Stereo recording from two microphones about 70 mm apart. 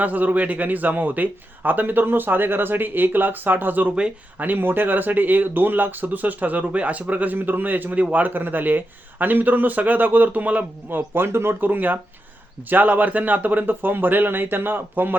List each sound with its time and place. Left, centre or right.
0.0 s speech: right